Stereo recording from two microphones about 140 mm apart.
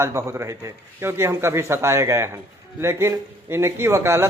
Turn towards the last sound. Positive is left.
turn(degrees=-20)  # may be behind; listen again after turning